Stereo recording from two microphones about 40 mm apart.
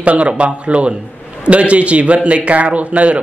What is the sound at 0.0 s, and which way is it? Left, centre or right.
A man's voice, right.